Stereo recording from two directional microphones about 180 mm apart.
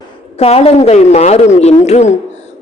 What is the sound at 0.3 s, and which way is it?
A woman's voice, 35° left (ahead or behind).